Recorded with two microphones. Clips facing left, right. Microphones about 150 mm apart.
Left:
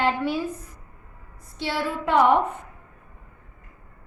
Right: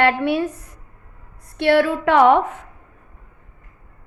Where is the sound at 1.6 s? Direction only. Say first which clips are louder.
Right 11 dB; 65° right (ahead or behind); by 2.6 s 90° right.